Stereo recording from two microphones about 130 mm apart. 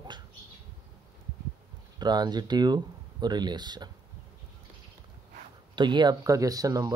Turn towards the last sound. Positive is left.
turn(degrees=-25)  # may be behind; listen again after turning